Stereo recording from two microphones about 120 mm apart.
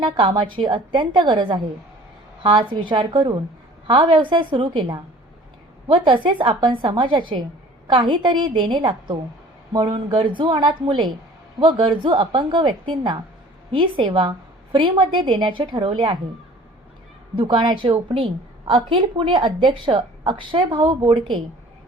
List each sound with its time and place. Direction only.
0.0 s a woman's voice: 40° right (ahead or behind)
17.3 s a woman's voice: 40° right (ahead or behind)